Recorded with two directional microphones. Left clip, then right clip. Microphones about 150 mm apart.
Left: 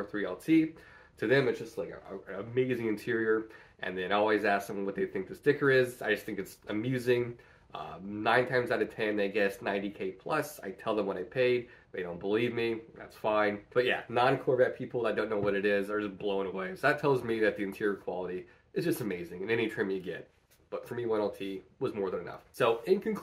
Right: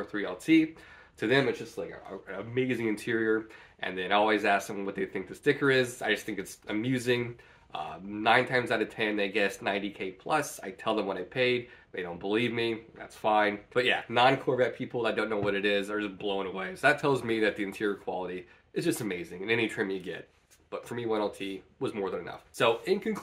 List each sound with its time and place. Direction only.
0.0 s speech: 15° right (ahead or behind)